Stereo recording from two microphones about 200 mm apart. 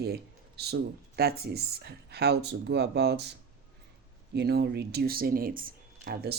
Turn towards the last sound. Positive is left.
turn(degrees=-55)  # may be behind; listen again after turning